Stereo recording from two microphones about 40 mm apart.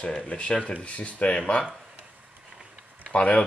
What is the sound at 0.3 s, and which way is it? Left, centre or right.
Speech, left.